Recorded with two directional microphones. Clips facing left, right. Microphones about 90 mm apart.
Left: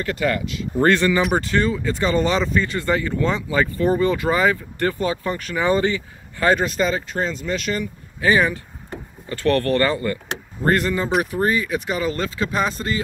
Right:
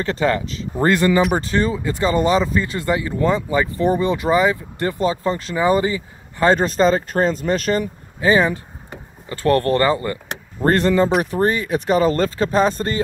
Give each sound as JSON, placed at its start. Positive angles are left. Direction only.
{"t": 0.0, "sound": "speech", "side_deg": -30}
{"t": 8.2, "sound": "speech", "side_deg": -25}
{"t": 10.6, "sound": "speech", "side_deg": -35}